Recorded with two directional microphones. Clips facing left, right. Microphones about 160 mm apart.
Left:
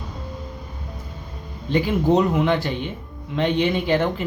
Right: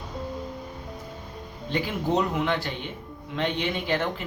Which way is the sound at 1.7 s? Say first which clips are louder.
Left 7 dB; 20° left (ahead or behind).